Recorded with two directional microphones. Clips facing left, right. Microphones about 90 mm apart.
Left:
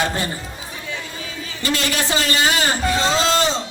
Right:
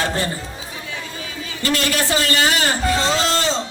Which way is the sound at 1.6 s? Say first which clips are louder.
Right 2 dB; 20° left (ahead or behind).